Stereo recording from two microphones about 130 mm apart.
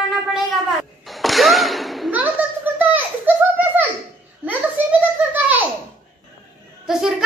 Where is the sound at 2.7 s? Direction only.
15° right (ahead or behind).